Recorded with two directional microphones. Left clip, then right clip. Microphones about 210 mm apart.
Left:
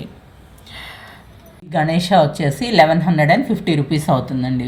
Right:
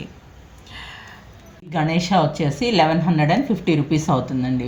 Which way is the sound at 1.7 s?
55° left (ahead or behind).